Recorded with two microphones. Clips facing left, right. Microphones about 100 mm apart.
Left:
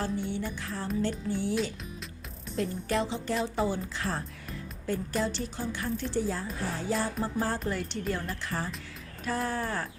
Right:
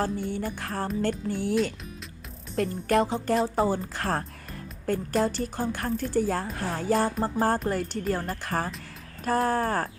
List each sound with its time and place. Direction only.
0.0 s a woman's voice: 45° right (ahead or behind)
2.6 s a woman's voice: 55° right (ahead or behind)
6.8 s a woman's voice: 50° right (ahead or behind)